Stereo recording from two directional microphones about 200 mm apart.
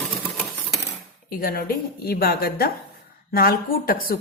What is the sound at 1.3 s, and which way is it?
Speech, 45° left (ahead or behind).